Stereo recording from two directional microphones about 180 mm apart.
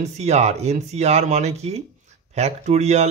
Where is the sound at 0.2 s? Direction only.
35° right (ahead or behind).